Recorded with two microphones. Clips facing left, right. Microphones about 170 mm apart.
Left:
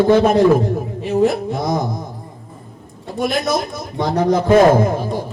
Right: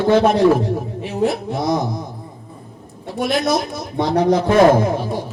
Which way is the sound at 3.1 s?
60° right (ahead or behind).